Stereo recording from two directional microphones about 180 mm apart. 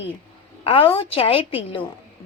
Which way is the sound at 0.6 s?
30° left (ahead or behind).